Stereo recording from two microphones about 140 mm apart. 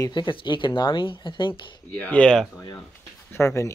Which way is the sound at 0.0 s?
35° left (ahead or behind).